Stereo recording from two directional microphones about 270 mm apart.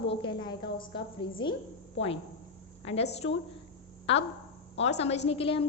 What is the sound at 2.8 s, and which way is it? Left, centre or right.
Speech, left.